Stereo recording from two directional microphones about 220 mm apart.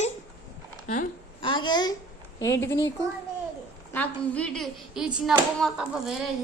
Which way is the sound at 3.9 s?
5° left (ahead or behind).